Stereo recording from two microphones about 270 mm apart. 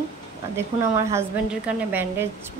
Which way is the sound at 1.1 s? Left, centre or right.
Centre.